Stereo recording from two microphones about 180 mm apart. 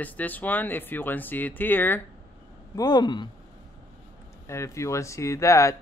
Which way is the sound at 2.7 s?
20° left (ahead or behind).